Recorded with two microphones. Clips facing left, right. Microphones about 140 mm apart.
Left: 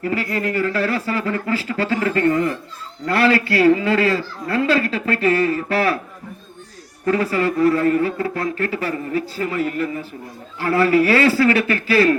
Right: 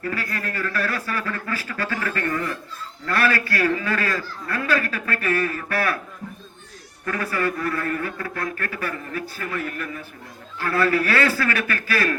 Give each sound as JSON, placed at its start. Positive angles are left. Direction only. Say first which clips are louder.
{"t": 0.0, "sound": "a man's voice", "louder": "left 7 dB", "side_deg": 25}
{"t": 7.0, "sound": "a man's voice", "louder": "left 6 dB", "side_deg": 25}